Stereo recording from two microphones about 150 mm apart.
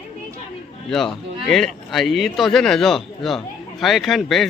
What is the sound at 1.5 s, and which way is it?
Speech, centre (ahead or behind).